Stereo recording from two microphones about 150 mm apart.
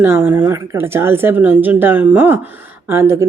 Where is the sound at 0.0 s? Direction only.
15° right (ahead or behind).